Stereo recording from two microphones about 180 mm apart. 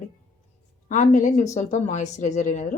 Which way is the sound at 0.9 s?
45° left (ahead or behind).